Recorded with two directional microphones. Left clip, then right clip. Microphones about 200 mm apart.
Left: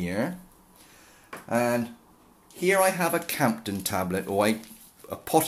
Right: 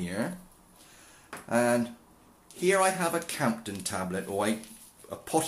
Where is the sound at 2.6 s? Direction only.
20° left (ahead or behind).